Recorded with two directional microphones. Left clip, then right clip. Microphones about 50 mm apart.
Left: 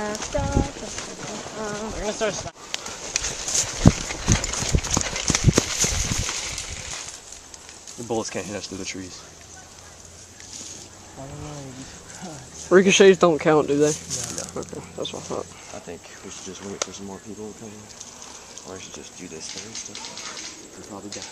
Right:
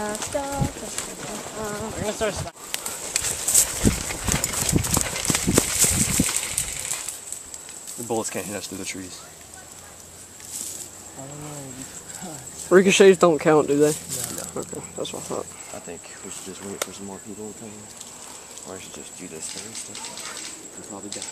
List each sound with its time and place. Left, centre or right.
0.3 s clip-clop: centre
1.0 s a sound: centre
2.7 s horse: centre
8.1 s speech: centre
12.2 s speech: centre
13.7 s speech: centre
14.0 s a sound: left
15.0 s speech: centre